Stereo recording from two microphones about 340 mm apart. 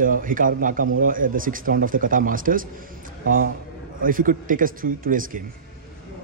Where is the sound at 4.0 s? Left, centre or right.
Right.